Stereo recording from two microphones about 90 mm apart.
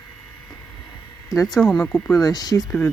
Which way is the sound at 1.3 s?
35° left (ahead or behind).